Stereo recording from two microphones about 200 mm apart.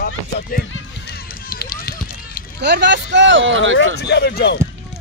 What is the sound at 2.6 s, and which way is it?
Speech, 60° right (ahead or behind).